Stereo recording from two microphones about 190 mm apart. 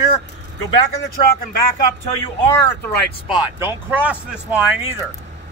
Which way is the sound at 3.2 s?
10° right (ahead or behind).